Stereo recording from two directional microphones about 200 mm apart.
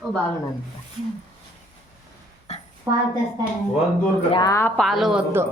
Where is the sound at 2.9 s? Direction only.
15° right (ahead or behind).